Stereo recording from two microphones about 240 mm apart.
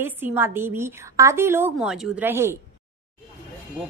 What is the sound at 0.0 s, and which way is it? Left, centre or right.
A woman's voice, centre.